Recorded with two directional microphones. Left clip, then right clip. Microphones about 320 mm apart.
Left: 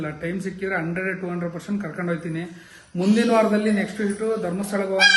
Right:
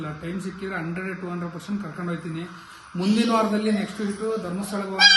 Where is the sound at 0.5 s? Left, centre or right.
Centre.